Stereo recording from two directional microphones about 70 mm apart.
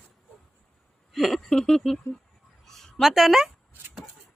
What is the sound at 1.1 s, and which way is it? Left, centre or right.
Speech, centre.